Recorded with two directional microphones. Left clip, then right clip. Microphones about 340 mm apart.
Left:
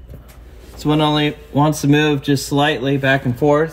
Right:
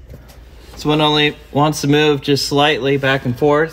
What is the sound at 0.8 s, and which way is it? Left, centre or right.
Speech, centre.